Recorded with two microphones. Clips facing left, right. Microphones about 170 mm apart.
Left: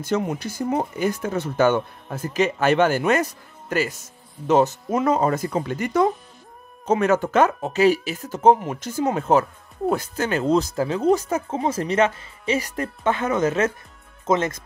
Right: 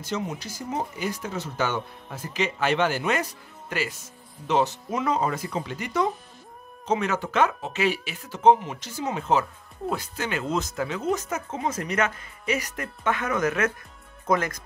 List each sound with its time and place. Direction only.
0.0 s speech: 55° left (ahead or behind); by 14.6 s 25° left (ahead or behind)